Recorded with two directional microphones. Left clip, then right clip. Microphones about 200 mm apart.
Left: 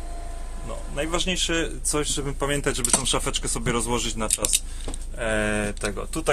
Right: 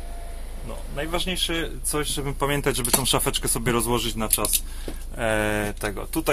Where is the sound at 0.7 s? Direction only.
5° left (ahead or behind).